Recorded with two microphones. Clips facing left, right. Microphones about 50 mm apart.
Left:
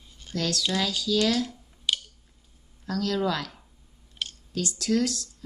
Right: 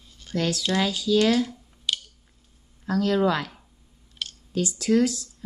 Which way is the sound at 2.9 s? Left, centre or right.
Right.